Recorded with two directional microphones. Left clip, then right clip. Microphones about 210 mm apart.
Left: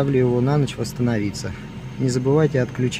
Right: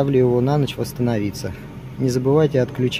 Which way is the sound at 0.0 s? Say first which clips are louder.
Right 2 dB; 15° right (ahead or behind).